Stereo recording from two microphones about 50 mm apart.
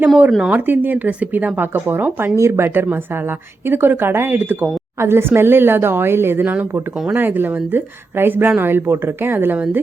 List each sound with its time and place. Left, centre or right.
0.3 s speech: centre
0.5 s a woman's voice: right
1.7 s speech: right
2.3 s speech: right